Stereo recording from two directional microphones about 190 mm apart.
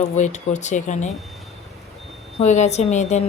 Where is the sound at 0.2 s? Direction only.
40° left (ahead or behind).